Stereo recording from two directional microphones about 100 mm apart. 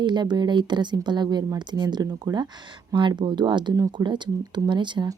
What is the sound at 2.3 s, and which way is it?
Speech, 35° right (ahead or behind).